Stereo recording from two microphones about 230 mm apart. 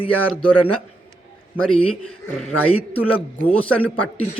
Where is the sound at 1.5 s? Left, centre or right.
Centre.